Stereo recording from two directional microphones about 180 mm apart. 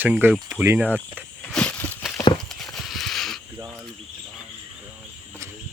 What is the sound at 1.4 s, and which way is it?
Walk, 5° left (ahead or behind).